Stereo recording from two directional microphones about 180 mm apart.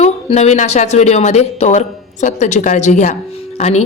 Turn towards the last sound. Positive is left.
turn(degrees=40)  # may be behind; listen again after turning